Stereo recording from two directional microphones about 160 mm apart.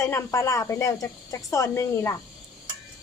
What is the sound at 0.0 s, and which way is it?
Speech, 15° left (ahead or behind).